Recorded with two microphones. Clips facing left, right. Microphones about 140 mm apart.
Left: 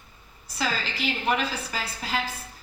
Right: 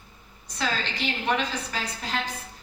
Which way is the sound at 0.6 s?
5° left (ahead or behind).